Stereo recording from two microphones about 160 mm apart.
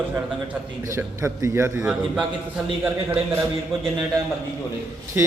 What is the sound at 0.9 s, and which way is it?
Speech, 20° right (ahead or behind).